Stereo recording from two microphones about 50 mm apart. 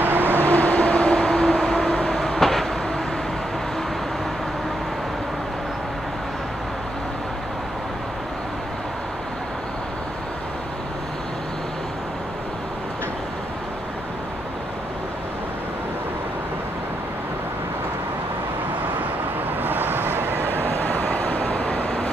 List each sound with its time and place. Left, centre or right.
0.0 s vehicle: right
0.5 s vehicle: left
2.0 s train: centre
19.6 s vehicle: right
20.6 s vehicle: left